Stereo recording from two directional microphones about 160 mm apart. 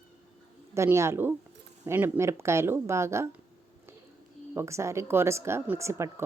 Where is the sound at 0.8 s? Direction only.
15° right (ahead or behind).